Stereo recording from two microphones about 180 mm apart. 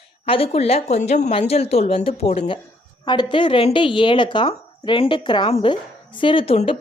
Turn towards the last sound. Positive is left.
turn(degrees=30)  # may be behind; listen again after turning